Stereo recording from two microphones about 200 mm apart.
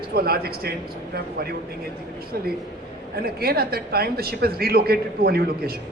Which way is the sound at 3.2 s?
50° right (ahead or behind).